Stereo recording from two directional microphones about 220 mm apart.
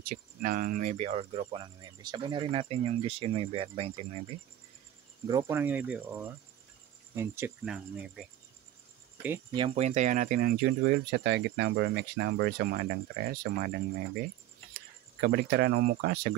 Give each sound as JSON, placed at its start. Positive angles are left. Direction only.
{"t": 0.0, "sound": "speech", "side_deg": -40}
{"t": 5.2, "sound": "speech", "side_deg": -15}
{"t": 9.5, "sound": "speech", "side_deg": -25}
{"t": 15.1, "sound": "speech", "side_deg": -50}